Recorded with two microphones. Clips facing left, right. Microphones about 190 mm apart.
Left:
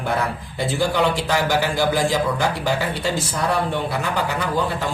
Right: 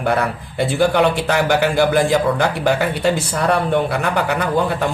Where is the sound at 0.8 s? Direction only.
60° right (ahead or behind).